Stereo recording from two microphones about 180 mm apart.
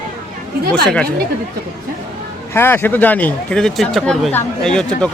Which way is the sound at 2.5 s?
10° left (ahead or behind).